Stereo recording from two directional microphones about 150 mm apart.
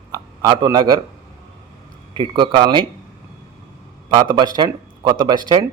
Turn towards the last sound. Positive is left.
turn(degrees=-30)  # may be behind; listen again after turning